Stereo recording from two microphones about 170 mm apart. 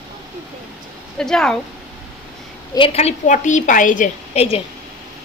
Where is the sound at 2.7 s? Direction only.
35° left (ahead or behind); by 4.4 s 50° left (ahead or behind).